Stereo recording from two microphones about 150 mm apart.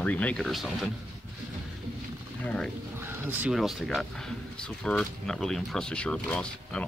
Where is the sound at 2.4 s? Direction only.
5° left (ahead or behind).